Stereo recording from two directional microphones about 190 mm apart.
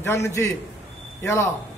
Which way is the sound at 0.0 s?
15° left (ahead or behind).